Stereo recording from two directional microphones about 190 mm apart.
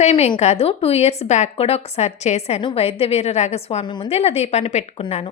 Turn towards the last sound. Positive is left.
turn(degrees=35)  # may be behind; listen again after turning